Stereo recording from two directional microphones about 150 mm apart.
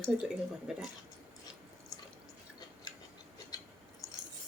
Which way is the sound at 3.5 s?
25° left (ahead or behind).